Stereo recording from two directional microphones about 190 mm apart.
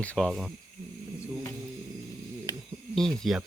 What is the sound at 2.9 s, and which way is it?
Speech, centre (ahead or behind).